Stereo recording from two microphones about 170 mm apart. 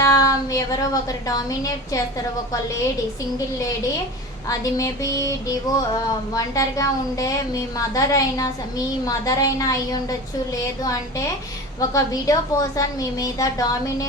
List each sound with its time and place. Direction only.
0.0 s a sound: 20° left (ahead or behind)
1.3 s a woman's voice: 20° left (ahead or behind)
4.4 s a woman's voice: 20° left (ahead or behind)
11.8 s a woman's voice: 20° left (ahead or behind)